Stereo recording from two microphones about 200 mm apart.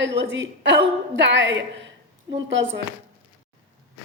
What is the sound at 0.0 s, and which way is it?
A woman's voice, 60° right (ahead or behind).